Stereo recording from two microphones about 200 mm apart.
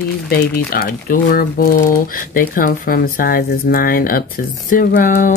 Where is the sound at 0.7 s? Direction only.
50° left (ahead or behind).